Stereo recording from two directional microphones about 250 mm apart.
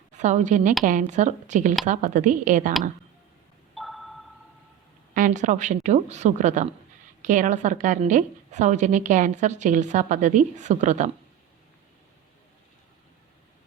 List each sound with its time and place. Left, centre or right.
0.1 s a woman's voice: right
3.8 s a sound: centre
5.1 s a woman's voice: right